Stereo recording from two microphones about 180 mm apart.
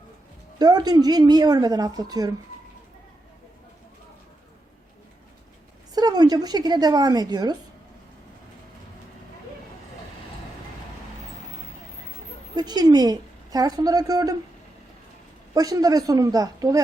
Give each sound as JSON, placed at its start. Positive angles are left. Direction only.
{"t": 0.6, "sound": "a woman's voice", "side_deg": -25}
{"t": 5.9, "sound": "a woman's voice", "side_deg": -20}
{"t": 12.5, "sound": "a woman's voice", "side_deg": -20}
{"t": 15.5, "sound": "a woman's voice", "side_deg": -20}